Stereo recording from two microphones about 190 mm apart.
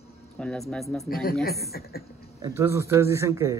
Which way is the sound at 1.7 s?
50° left (ahead or behind).